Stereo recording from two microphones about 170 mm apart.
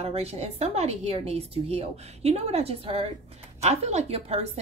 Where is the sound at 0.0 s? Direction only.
35° right (ahead or behind).